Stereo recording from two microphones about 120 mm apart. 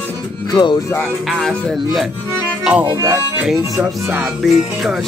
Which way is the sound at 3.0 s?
25° right (ahead or behind).